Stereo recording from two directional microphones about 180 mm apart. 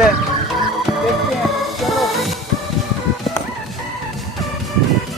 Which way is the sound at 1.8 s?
Centre (ahead or behind).